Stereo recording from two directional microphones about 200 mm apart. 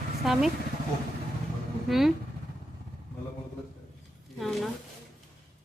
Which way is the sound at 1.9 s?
Centre (ahead or behind).